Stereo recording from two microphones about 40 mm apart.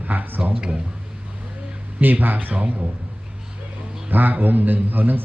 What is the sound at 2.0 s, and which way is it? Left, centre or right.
Speech, right.